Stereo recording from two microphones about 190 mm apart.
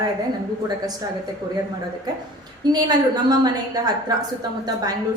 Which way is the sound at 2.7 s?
20° right (ahead or behind).